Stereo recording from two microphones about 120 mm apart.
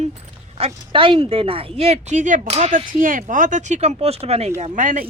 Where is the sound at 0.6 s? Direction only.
50° right (ahead or behind).